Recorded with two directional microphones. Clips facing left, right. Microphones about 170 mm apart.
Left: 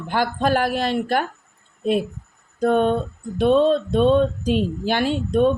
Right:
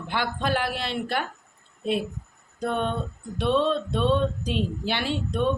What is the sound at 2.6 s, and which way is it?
Speech, 45° left (ahead or behind).